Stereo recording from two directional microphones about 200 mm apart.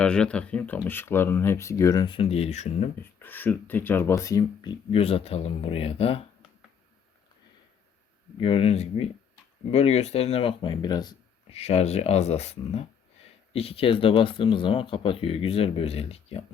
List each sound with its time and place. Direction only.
0.0 s speech: 5° left (ahead or behind); by 2.9 s 35° left (ahead or behind)
3.0 s speech: 10° left (ahead or behind); by 6.1 s 30° left (ahead or behind)
8.4 s speech: 30° left (ahead or behind)
11.5 s speech: 30° left (ahead or behind)